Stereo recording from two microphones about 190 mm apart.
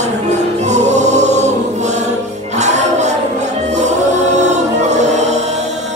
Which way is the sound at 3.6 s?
35° right (ahead or behind).